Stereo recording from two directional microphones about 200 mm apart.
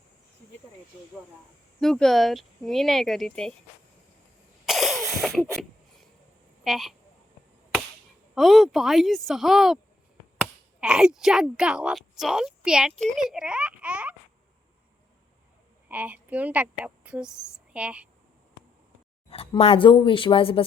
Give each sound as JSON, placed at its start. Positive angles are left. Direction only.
{"t": 1.8, "sound": "a woman's voice", "side_deg": 0}
{"t": 4.6, "sound": "a sound", "side_deg": 0}
{"t": 6.7, "sound": "a woman's voice", "side_deg": 0}
{"t": 8.4, "sound": "a woman's voice", "side_deg": 0}
{"t": 10.8, "sound": "a woman's voice", "side_deg": -5}
{"t": 15.9, "sound": "a woman's voice", "side_deg": -10}
{"t": 19.3, "sound": "speech", "side_deg": 30}